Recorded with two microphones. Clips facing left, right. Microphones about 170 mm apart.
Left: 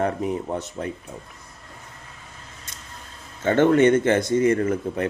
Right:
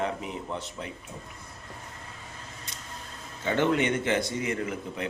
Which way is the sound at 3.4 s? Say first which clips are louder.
Left 9 dB; 50° left (ahead or behind).